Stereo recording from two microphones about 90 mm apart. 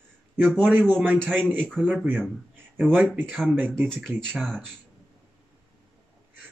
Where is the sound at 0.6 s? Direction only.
20° right (ahead or behind).